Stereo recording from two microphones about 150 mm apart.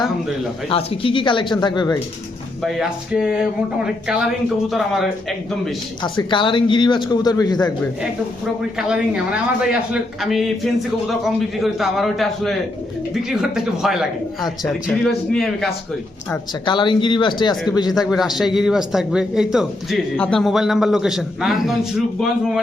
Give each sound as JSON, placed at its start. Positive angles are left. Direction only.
{"t": 0.7, "sound": "a man's voice", "side_deg": 40}
{"t": 2.6, "sound": "a man's voice", "side_deg": -5}
{"t": 6.0, "sound": "a man's voice", "side_deg": 30}
{"t": 8.9, "sound": "a man's voice", "side_deg": -5}
{"t": 16.6, "sound": "a man's voice", "side_deg": 30}
{"t": 18.1, "sound": "a man's voice", "side_deg": 0}